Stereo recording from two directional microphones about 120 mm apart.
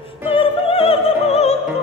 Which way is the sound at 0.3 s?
50° left (ahead or behind).